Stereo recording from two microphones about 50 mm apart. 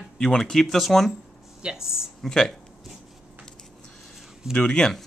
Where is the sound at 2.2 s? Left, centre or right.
Centre.